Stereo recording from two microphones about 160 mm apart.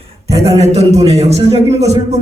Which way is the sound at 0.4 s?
40° right (ahead or behind).